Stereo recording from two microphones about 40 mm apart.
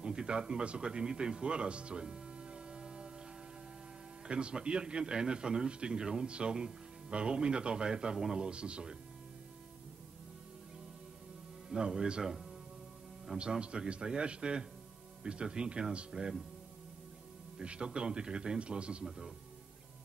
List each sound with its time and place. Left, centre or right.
0.0 s speech: centre
4.3 s a man's voice: right
8.5 s a man's voice: right
11.8 s a man's voice: right
17.6 s a man's voice: right
19.0 s speech: centre